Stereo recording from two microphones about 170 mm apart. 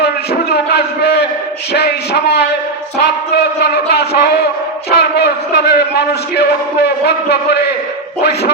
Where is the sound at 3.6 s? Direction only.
70° left (ahead or behind).